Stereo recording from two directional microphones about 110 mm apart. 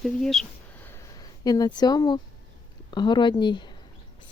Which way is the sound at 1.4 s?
35° left (ahead or behind).